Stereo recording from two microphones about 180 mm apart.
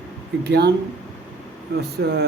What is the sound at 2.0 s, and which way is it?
Speech, 60° right (ahead or behind).